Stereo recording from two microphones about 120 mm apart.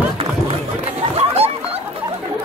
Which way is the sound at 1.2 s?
55° right (ahead or behind).